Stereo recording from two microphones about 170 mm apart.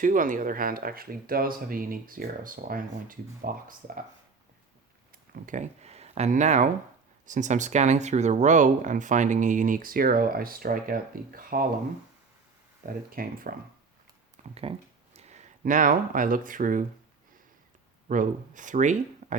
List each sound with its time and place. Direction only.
0.0 s speech: 50° right (ahead or behind)
5.3 s speech: 50° right (ahead or behind)
12.8 s speech: 60° right (ahead or behind)
14.4 s a sound: 45° right (ahead or behind)
15.1 s speech: 40° right (ahead or behind)
18.1 s speech: 50° right (ahead or behind)